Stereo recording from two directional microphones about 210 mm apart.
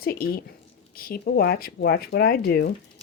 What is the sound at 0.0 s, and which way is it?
Speech, 45° left (ahead or behind).